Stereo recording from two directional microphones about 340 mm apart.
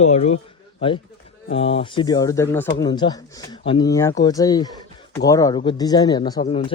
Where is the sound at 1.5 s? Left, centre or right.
Centre.